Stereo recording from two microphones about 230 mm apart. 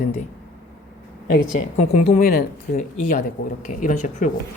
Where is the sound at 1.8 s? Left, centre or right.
Left.